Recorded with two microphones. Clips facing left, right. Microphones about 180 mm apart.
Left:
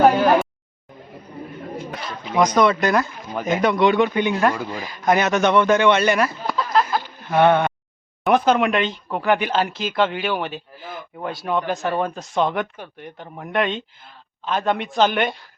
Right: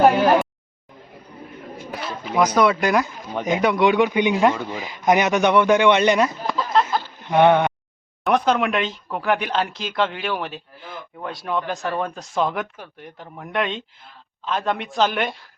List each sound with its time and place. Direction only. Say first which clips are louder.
1.9 s a man's voice: right 1 dB; centre (ahead or behind); by 6.3 s 20° right (ahead or behind)
6.4 s a sound: even; centre (ahead or behind)
7.3 s speech: right 1 dB; 15° right (ahead or behind)
8.2 s speech: left 2 dB; centre (ahead or behind)